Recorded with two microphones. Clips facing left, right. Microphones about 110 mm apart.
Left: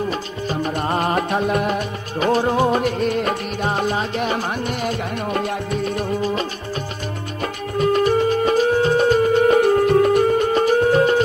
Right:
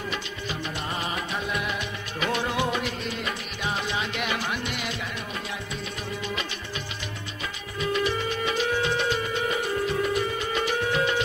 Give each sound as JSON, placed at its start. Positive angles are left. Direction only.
{"t": 0.1, "sound": "music", "side_deg": 45}
{"t": 7.7, "sound": "music", "side_deg": 45}